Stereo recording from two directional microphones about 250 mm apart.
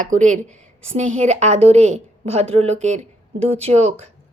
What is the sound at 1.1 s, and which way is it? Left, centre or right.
A woman's voice, right.